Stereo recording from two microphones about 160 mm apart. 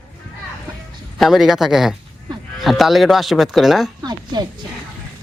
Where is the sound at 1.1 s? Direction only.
Centre (ahead or behind).